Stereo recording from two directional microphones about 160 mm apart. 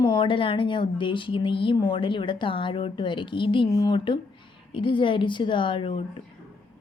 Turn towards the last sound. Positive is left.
turn(degrees=35)  # may be behind; listen again after turning